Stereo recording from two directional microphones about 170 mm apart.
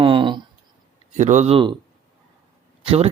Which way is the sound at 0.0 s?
30° right (ahead or behind).